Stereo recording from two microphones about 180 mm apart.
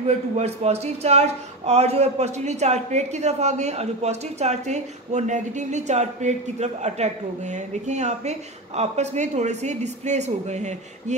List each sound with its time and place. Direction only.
0.0 s a man's voice: 35° right (ahead or behind)